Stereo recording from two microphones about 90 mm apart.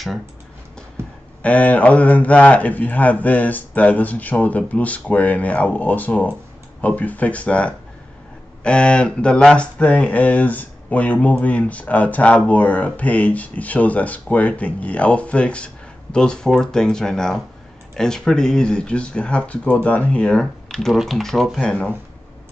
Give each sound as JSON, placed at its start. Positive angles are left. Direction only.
{"t": 1.4, "sound": "speech", "side_deg": 15}